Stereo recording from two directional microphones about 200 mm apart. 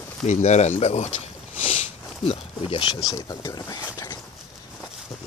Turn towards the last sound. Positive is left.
turn(degrees=20)  # may be behind; listen again after turning